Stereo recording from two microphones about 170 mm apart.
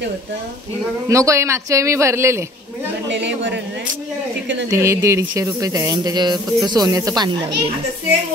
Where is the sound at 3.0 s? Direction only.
90° right.